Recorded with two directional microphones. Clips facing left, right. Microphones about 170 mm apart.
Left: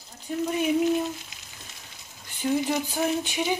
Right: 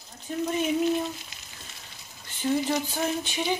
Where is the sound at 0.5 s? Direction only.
10° left (ahead or behind).